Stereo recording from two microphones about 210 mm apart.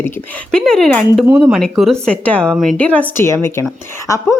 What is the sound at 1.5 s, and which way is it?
Speech, centre (ahead or behind).